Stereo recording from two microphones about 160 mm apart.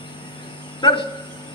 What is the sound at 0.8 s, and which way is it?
Cricket, 30° left (ahead or behind).